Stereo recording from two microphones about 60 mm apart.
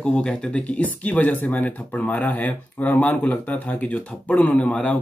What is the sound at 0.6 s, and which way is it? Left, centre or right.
Speech, left.